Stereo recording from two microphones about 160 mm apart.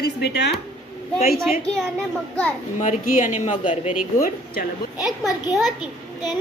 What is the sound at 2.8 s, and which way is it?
Speech, 55° left (ahead or behind).